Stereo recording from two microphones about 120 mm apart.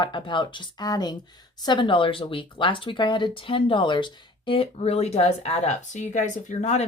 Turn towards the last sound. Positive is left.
turn(degrees=65)  # may be behind; listen again after turning